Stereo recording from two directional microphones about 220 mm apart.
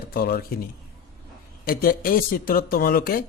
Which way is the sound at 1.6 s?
40° left (ahead or behind).